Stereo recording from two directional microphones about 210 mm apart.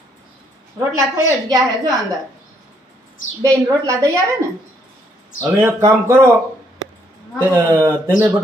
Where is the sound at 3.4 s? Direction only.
15° right (ahead or behind).